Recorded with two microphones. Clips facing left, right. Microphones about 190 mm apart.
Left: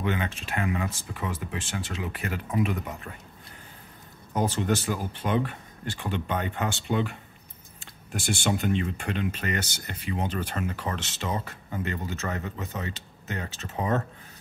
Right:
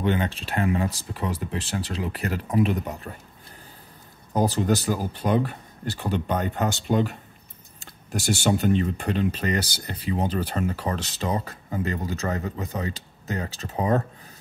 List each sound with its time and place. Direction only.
0.0 s speech: 35° right (ahead or behind)
4.3 s speech: 35° right (ahead or behind)